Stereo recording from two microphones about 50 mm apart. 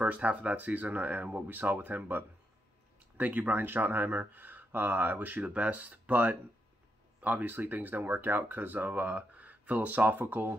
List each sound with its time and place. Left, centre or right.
0.0 s speech: right